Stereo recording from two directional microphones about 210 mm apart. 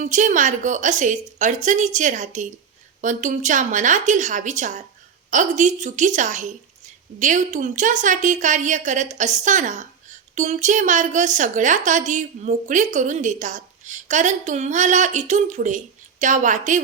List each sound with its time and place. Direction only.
0.0 s a woman's voice: 35° right (ahead or behind)